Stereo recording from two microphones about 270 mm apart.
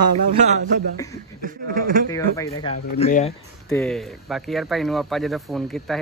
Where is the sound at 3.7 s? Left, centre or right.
Centre.